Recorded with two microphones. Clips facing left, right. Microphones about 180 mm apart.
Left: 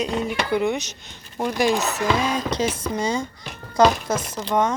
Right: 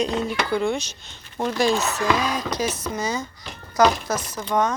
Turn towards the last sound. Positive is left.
turn(degrees=25)  # may be behind; listen again after turning